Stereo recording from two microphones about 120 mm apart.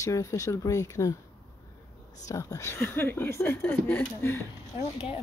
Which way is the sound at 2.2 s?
30° left (ahead or behind).